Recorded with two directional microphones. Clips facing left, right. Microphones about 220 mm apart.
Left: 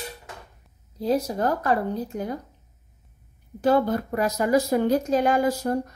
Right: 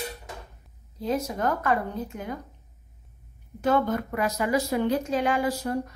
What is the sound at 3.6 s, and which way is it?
A woman's voice, 35° left (ahead or behind).